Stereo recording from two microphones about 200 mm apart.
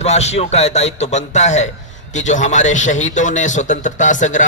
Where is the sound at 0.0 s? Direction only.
35° left (ahead or behind).